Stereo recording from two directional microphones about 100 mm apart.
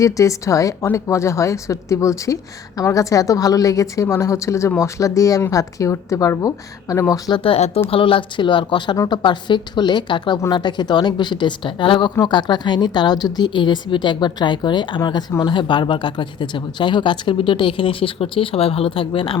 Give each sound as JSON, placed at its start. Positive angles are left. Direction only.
{"t": 0.0, "sound": "speech", "side_deg": 35}
{"t": 7.1, "sound": "a woman's voice", "side_deg": 45}
{"t": 7.4, "sound": "speech", "side_deg": 80}
{"t": 7.9, "sound": "a woman's voice", "side_deg": 60}